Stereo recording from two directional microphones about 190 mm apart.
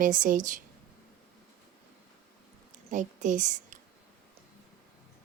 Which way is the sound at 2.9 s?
40° right (ahead or behind).